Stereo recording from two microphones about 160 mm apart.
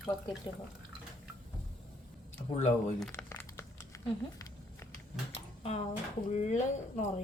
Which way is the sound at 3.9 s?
20° left (ahead or behind).